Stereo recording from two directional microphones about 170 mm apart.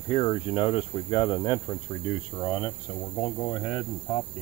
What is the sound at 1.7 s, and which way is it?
Speech, 10° left (ahead or behind).